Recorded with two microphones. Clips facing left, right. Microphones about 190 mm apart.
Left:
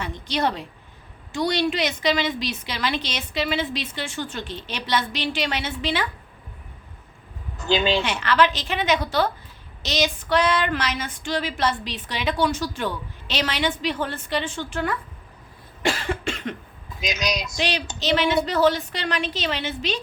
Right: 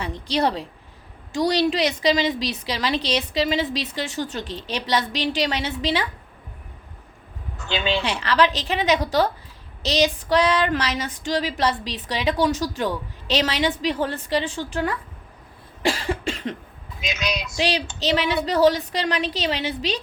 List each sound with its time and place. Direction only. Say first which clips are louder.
0.0 s a woman's voice: right 2 dB; 35° right (ahead or behind)
1.3 s female singing: right 3 dB; 35° right (ahead or behind)
7.6 s speech: left 3 dB; 40° left (ahead or behind)
8.0 s female singing: even; 35° right (ahead or behind)
15.8 s cough: right 1 dB; 35° right (ahead or behind)
17.0 s speech: left 1 dB; 40° left (ahead or behind)
17.6 s female singing: right 3 dB; 35° right (ahead or behind)